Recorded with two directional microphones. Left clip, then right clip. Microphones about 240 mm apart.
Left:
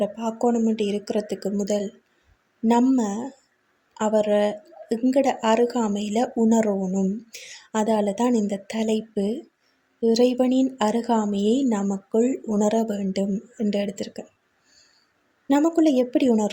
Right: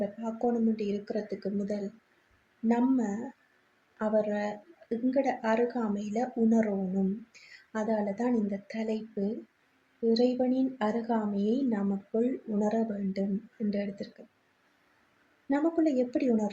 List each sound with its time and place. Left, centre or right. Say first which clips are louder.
0.2 s a woman's voice: left 7 dB; left
15.4 s a woman's voice: left 8 dB; left